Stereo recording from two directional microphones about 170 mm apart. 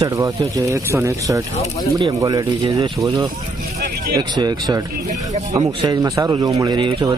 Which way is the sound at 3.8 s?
65° right (ahead or behind).